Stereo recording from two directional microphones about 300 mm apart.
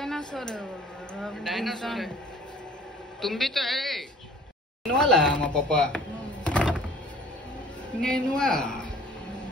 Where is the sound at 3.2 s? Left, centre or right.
Centre.